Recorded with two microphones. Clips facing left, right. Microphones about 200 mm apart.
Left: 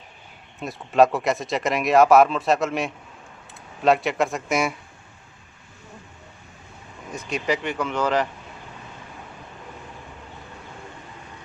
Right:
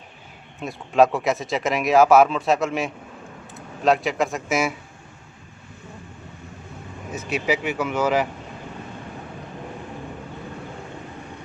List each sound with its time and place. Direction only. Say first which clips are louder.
0.6 s speech: even; centre (ahead or behind)
7.1 s speech: right 2 dB; 5° right (ahead or behind)